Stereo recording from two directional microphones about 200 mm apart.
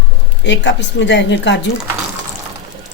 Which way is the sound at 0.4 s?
65° left (ahead or behind).